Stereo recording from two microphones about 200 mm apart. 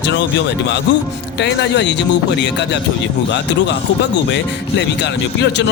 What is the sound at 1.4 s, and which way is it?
Speech, 60° left (ahead or behind).